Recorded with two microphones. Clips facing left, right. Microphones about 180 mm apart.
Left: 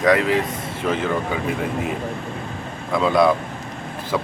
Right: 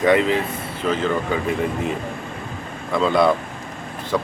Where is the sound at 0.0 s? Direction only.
Centre (ahead or behind).